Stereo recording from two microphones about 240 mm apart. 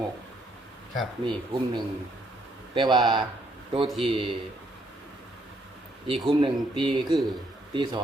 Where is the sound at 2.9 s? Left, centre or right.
Centre.